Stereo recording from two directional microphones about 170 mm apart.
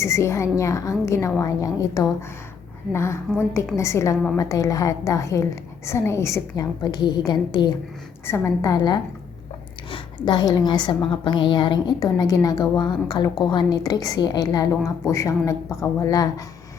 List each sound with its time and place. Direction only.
0.0 s a woman's voice: 15° left (ahead or behind)